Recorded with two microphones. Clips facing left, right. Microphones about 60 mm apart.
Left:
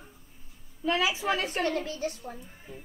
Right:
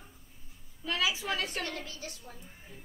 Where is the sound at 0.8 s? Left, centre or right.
Left.